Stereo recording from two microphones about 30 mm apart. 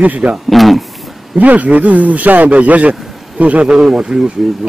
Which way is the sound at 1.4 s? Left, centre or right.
Right.